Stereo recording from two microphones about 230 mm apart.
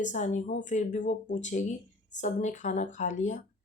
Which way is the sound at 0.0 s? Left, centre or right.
Left.